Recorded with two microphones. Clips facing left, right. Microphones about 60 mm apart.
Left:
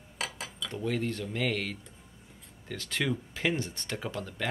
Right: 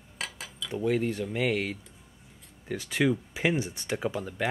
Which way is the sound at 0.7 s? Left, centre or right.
Centre.